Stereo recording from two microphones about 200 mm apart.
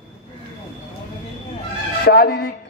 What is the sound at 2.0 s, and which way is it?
Speech, 50° left (ahead or behind).